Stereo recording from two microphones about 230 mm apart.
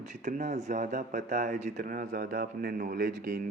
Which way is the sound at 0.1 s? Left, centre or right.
Right.